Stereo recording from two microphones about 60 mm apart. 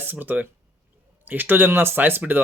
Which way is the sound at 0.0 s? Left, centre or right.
Right.